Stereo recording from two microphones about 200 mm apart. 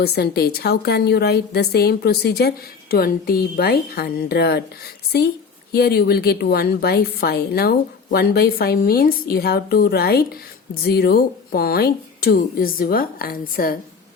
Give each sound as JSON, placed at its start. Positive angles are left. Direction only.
{"t": 0.0, "sound": "a woman's voice", "side_deg": 55}
{"t": 5.7, "sound": "a woman's voice", "side_deg": 50}